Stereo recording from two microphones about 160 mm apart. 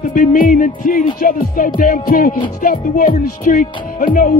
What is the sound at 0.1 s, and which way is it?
Music, 60° left (ahead or behind).